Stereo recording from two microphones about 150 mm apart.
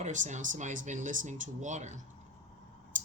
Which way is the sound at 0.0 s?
55° right (ahead or behind).